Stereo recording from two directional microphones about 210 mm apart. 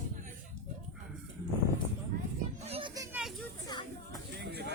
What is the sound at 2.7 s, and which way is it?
Children playing, 25° right (ahead or behind).